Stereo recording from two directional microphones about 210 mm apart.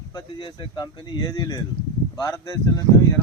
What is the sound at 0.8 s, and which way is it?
Speech, 20° left (ahead or behind).